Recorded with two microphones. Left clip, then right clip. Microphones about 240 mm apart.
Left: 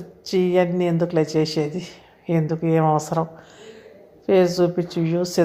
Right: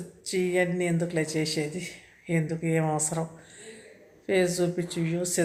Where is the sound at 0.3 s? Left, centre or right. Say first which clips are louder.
Left 7 dB; left.